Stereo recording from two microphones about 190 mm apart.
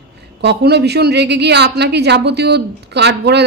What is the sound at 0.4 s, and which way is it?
Speech, 60° right (ahead or behind).